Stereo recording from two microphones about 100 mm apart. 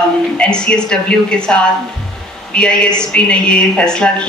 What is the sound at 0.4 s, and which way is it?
A woman's voice, 10° left (ahead or behind).